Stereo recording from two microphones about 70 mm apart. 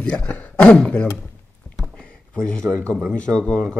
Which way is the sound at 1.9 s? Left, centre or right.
Centre.